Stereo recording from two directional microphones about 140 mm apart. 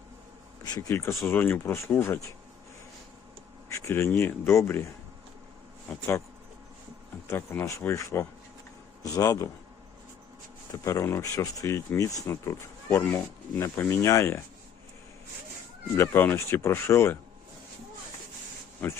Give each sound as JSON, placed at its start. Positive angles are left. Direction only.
{"t": 0.7, "sound": "speech", "side_deg": 20}
{"t": 3.8, "sound": "speech", "side_deg": 20}
{"t": 5.9, "sound": "speech", "side_deg": 10}
{"t": 7.3, "sound": "speech", "side_deg": 15}
{"t": 10.7, "sound": "speech", "side_deg": 20}
{"t": 16.0, "sound": "speech", "side_deg": 15}